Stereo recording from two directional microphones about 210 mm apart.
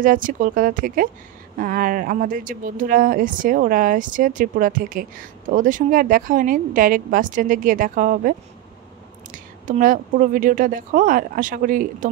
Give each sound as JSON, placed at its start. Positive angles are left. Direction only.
{"t": 0.0, "sound": "a woman's voice", "side_deg": -40}